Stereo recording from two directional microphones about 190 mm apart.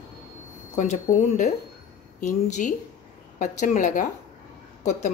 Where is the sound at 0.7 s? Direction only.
40° left (ahead or behind).